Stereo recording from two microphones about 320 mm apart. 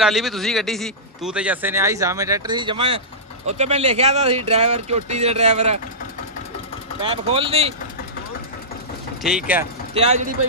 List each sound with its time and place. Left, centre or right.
0.0 s speech: centre
7.0 s speech: centre
9.2 s speech: centre
9.9 s speech: centre